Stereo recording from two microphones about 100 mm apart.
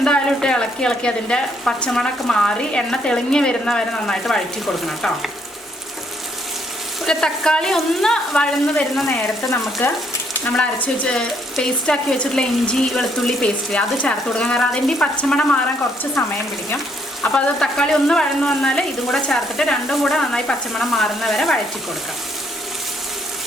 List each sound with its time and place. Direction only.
0.0 s speech: 10° left (ahead or behind)
7.0 s speech: 5° left (ahead or behind)
9.8 s frying: 20° left (ahead or behind)
10.6 s speech: 10° left (ahead or behind)
17.3 s speech: 5° left (ahead or behind)